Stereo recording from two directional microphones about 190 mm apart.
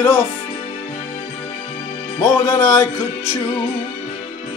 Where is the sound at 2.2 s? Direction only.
15° left (ahead or behind).